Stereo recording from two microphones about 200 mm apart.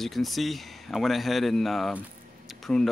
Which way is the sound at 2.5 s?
Centre (ahead or behind).